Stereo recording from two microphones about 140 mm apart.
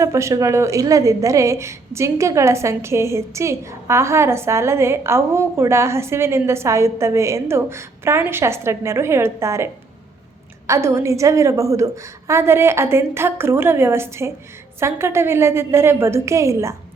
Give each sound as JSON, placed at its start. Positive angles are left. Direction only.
{"t": 0.0, "sound": "a woman's voice", "side_deg": -20}
{"t": 10.7, "sound": "a woman's voice", "side_deg": -20}